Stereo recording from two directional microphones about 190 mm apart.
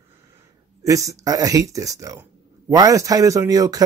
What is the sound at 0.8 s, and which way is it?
Speech, 15° right (ahead or behind).